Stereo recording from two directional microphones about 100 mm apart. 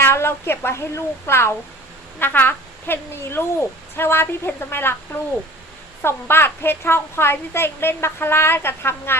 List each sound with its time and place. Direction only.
0.0 s a woman's voice: 25° left (ahead or behind)
6.0 s a woman's voice: 25° left (ahead or behind)